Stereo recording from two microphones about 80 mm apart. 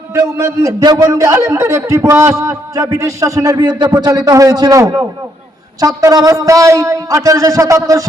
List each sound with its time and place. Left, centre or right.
0.1 s a man's voice: right
0.8 s a man's voice: right
3.6 s speech: right
4.0 s a man's voice: right